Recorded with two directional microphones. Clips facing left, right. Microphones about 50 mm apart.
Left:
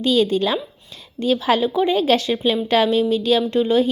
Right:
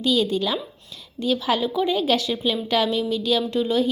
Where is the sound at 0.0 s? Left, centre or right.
Left.